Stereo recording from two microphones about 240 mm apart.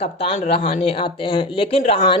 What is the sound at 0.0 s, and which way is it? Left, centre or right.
Speech, left.